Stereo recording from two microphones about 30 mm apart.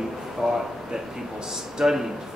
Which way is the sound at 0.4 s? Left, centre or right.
Centre.